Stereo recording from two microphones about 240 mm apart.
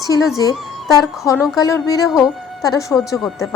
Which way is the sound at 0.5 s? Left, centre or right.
Centre.